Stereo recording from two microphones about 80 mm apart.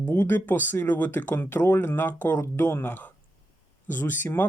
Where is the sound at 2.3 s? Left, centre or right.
Left.